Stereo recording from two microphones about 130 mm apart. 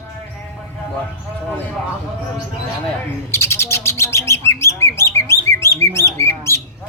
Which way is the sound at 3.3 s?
20° left (ahead or behind).